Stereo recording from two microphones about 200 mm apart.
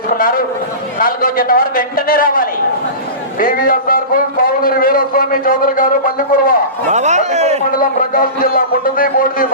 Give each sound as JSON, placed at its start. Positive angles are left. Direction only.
{"t": 0.9, "sound": "a man's voice", "side_deg": 45}
{"t": 6.9, "sound": "speech", "side_deg": -35}
{"t": 7.8, "sound": "a man's voice", "side_deg": 45}